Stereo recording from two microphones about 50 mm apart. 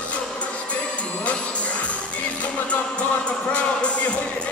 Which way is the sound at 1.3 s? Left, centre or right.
Left.